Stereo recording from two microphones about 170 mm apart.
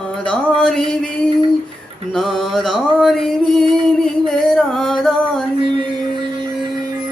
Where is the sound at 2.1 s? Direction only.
Centre (ahead or behind).